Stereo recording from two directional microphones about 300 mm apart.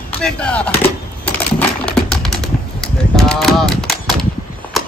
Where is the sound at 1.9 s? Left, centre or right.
Centre.